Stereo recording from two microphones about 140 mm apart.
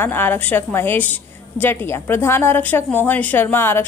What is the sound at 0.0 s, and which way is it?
A woman's voice, 15° left (ahead or behind).